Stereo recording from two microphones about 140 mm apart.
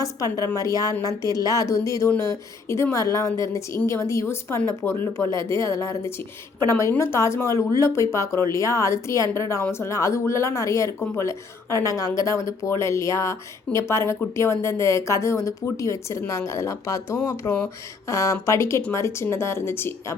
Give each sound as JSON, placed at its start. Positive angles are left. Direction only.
{"t": 0.0, "sound": "speech", "side_deg": 25}